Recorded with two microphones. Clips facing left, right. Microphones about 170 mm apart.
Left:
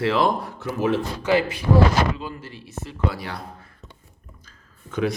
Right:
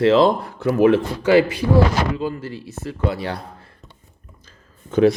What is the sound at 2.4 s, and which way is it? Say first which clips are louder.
A man's voice: right 6 dB; 35° right (ahead or behind).